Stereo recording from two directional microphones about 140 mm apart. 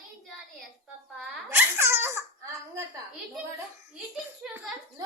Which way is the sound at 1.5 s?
15° right (ahead or behind).